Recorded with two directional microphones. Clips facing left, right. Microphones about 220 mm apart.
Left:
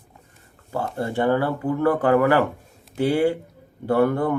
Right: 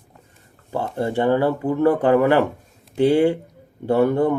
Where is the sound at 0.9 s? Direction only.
20° right (ahead or behind).